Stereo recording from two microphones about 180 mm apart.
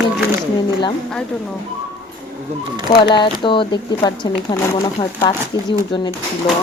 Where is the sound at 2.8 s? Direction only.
25° left (ahead or behind).